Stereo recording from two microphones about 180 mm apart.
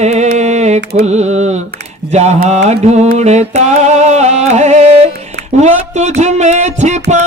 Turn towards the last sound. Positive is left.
turn(degrees=-40)  # may be behind; listen again after turning